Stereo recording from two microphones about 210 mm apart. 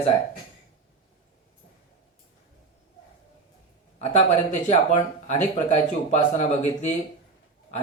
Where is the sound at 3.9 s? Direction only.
30° left (ahead or behind).